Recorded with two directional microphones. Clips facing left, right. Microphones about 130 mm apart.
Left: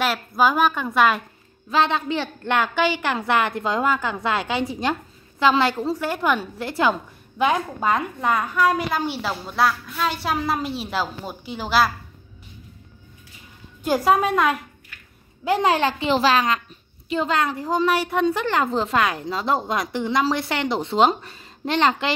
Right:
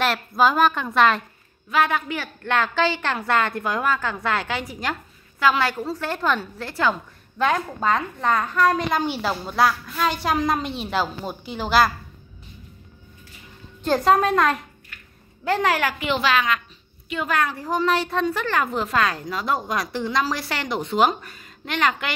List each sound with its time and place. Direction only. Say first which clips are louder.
0.0 s a woman's voice: even; 5° left (ahead or behind)
1.7 s a woman's voice: left 1 dB; 25° left (ahead or behind)
5.9 s a woman's voice: left 2 dB; 10° left (ahead or behind)
13.8 s a woman's voice: right 1 dB; 5° left (ahead or behind)
15.4 s a woman's voice: left 2 dB; 20° left (ahead or behind)